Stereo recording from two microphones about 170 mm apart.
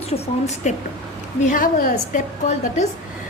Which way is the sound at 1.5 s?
55° left (ahead or behind).